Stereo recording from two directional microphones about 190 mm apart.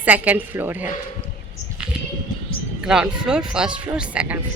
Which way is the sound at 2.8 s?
5° right (ahead or behind).